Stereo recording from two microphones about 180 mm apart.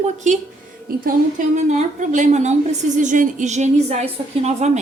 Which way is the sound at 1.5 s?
40° right (ahead or behind).